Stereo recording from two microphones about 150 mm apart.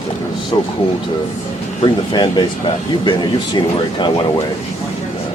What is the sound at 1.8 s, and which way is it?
Speech, 30° left (ahead or behind).